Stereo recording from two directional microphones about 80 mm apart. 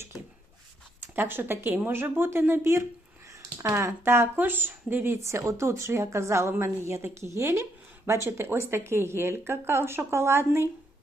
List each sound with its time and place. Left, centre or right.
1.0 s speech: right